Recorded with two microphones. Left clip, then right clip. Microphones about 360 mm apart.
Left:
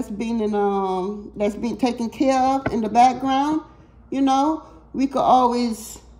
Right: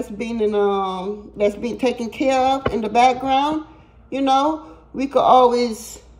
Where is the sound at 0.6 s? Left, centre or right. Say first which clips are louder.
Right 2 dB; centre.